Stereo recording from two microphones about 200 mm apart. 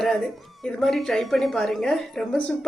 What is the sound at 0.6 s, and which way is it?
Speech, centre (ahead or behind).